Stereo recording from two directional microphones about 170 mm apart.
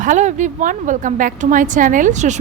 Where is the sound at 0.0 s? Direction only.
45° right (ahead or behind).